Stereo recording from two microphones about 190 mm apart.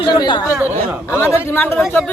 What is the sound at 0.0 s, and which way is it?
Speech, 25° left (ahead or behind).